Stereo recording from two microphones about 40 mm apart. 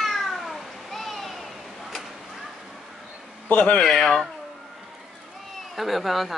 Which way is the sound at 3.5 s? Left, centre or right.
Left.